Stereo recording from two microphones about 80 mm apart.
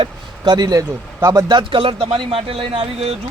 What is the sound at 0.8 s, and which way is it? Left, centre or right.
Speech, right.